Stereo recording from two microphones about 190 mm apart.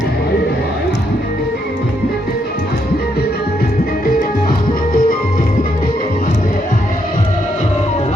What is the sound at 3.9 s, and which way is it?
Music, 50° left (ahead or behind).